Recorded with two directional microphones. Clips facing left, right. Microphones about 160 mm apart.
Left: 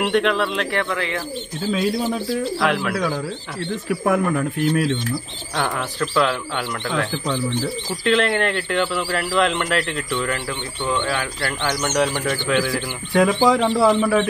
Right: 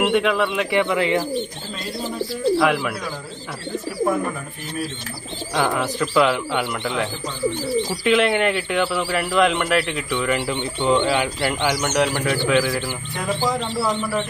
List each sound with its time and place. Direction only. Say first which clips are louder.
0.0 s speech: even; 5° right (ahead or behind)
2.6 s speech: right 1 dB; 5° right (ahead or behind)
3.9 s speech: left 3 dB; 80° left
5.6 s speech: right 2 dB; 10° right (ahead or behind)
13.1 s speech: left 8 dB; 90° left